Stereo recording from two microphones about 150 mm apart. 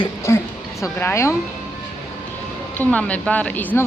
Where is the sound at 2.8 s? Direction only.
10° left (ahead or behind).